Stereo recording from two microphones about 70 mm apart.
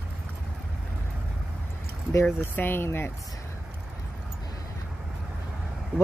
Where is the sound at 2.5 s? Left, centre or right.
Left.